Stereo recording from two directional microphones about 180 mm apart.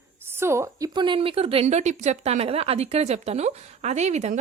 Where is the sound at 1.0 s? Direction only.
30° right (ahead or behind).